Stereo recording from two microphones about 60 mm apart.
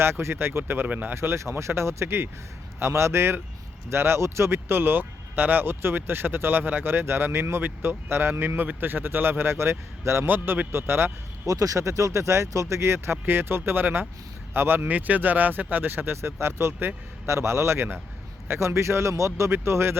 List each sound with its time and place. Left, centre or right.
0.0 s speech: right
1.4 s a man's voice: right
10.2 s speech: right
11.4 s speech: right
14.8 s speech: right
17.7 s speech: right
19.5 s speech: right